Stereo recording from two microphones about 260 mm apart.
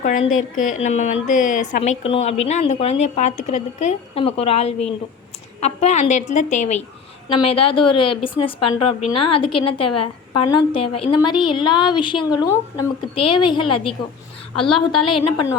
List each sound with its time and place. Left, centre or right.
0.0 s a woman's voice: left
9.7 s a woman's voice: left
11.0 s a woman's voice: centre